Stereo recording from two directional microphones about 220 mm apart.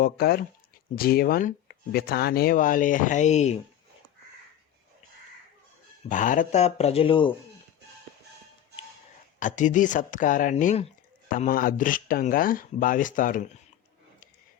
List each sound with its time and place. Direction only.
0.0 s speech: 40° left (ahead or behind)
6.1 s speech: 35° left (ahead or behind)
9.4 s speech: 35° left (ahead or behind)